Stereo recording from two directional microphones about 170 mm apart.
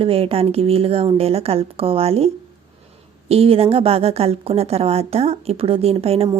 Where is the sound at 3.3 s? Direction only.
35° right (ahead or behind).